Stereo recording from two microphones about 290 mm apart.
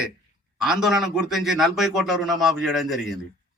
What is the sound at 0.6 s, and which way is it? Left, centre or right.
A man's voice, centre.